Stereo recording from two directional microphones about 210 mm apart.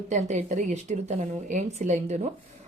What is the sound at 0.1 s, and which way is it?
Speech, 35° right (ahead or behind).